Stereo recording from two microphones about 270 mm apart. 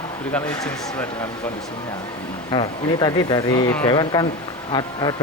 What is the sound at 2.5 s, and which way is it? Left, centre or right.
Speech, centre.